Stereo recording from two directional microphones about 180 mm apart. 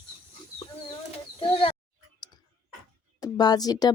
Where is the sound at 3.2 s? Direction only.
20° left (ahead or behind).